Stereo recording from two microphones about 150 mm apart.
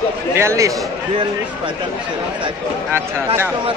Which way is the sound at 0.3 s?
20° right (ahead or behind).